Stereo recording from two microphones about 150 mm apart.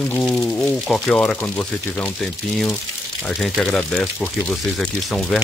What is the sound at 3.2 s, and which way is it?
Speech, 5° left (ahead or behind).